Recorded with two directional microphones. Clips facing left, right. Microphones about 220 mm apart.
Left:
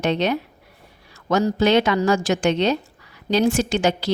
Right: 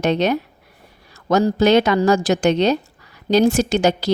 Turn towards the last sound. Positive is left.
turn(degrees=-40)  # may be behind; listen again after turning